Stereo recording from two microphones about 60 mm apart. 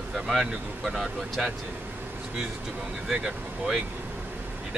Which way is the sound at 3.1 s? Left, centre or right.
Centre.